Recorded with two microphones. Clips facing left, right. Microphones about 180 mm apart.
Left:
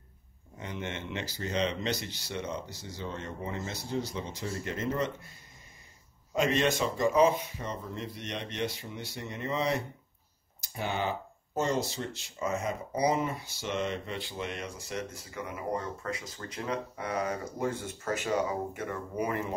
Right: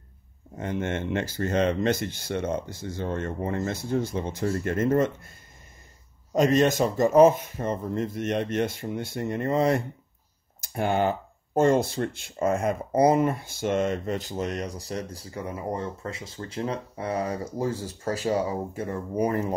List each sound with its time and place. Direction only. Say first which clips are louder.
0.6 s speech: right 9 dB; 50° right (ahead or behind)
6.3 s speech: right 7 dB; 40° right (ahead or behind)